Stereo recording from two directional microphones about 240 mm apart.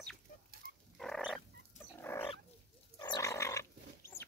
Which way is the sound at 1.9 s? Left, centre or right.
Centre.